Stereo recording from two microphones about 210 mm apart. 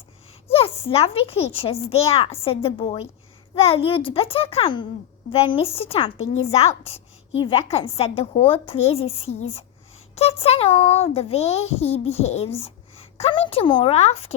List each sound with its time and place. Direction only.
0.4 s a child's voice: 25° left (ahead or behind)